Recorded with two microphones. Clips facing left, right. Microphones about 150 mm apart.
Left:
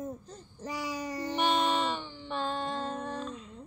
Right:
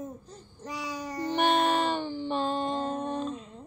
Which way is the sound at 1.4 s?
55° right (ahead or behind).